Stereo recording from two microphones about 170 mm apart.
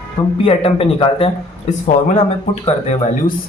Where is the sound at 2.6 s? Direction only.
40° left (ahead or behind).